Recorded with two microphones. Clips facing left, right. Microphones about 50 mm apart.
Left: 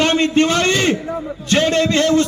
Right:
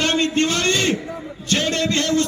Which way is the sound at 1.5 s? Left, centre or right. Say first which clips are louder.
Left 5 dB; left.